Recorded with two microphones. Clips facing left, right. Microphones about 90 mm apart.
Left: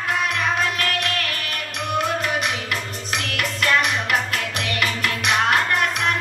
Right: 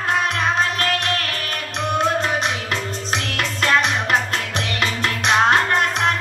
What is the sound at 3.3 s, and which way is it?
Music, 30° right (ahead or behind).